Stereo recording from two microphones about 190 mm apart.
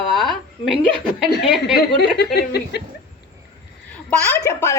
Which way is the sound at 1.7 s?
55° left (ahead or behind).